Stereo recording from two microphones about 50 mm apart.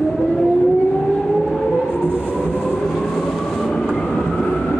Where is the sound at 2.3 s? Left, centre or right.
Left.